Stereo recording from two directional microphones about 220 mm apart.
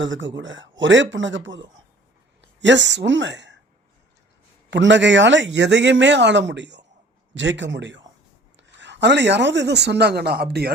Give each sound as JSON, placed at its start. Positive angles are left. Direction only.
{"t": 0.0, "sound": "speech", "side_deg": -60}
{"t": 2.4, "sound": "speech", "side_deg": -55}
{"t": 4.7, "sound": "speech", "side_deg": -55}